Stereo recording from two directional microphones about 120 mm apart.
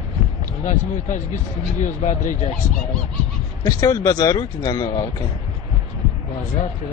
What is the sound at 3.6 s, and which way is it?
Speech, 30° left (ahead or behind).